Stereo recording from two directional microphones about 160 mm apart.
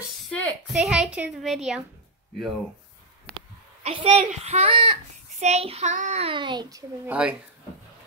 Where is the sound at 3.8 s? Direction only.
35° right (ahead or behind).